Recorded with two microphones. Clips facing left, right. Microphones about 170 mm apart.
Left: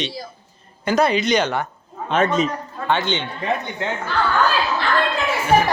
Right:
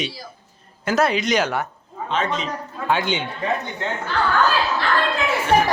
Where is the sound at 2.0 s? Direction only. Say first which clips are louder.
Left 6 dB; 50° left (ahead or behind).